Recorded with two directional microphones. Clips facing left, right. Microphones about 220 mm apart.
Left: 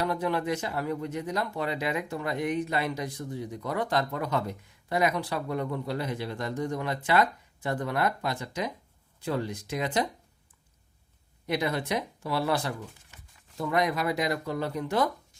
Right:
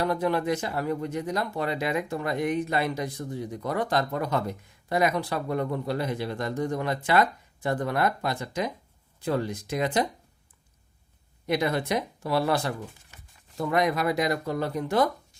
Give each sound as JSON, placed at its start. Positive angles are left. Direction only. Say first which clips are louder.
{"t": 0.0, "sound": "speech", "louder": "right 3 dB", "side_deg": -40}
{"t": 11.4, "sound": "speech", "louder": "right 3 dB", "side_deg": -50}